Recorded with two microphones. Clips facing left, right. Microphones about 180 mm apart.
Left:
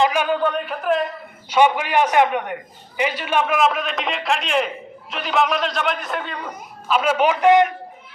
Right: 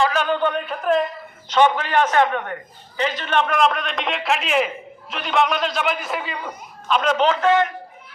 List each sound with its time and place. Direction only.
0.0 s a man's voice: 10° left (ahead or behind)